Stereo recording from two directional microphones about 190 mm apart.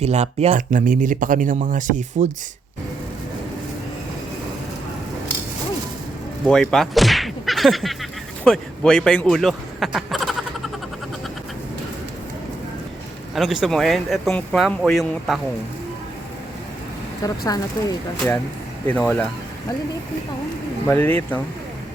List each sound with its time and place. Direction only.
0.0 s speech: 35° right (ahead or behind)
6.4 s whip: 5° left (ahead or behind)
8.4 s speech: 5° left (ahead or behind)
13.3 s speech: centre (ahead or behind)
17.2 s speech: 20° left (ahead or behind)
18.9 s speech: 10° left (ahead or behind)
20.8 s speech: 10° left (ahead or behind)